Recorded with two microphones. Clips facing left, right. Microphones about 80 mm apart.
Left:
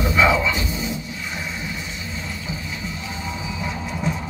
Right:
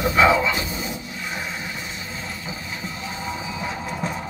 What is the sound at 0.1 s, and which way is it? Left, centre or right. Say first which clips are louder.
Speech: right 1 dB; right.